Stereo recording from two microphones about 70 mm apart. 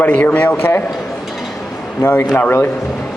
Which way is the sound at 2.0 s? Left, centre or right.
Left.